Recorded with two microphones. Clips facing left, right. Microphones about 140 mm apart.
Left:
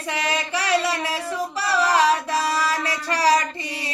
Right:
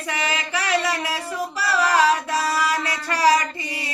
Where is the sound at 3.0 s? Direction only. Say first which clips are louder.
Right 2 dB; 35° left (ahead or behind).